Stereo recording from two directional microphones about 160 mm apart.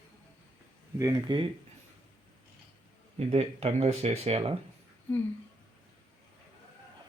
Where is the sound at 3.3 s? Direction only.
40° right (ahead or behind).